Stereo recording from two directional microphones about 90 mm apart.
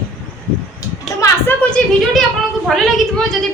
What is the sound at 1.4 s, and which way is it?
Speech, 15° left (ahead or behind).